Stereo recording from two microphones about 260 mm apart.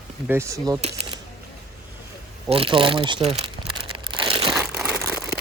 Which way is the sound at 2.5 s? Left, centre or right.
Right.